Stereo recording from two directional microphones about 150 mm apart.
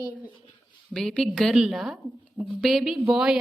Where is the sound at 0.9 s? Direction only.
Centre (ahead or behind).